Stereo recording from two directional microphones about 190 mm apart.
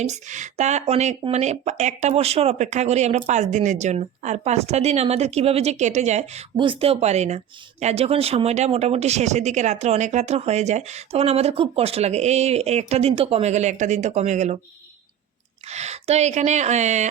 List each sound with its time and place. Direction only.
0.0 s speech: 40° right (ahead or behind)
15.7 s speech: 35° right (ahead or behind)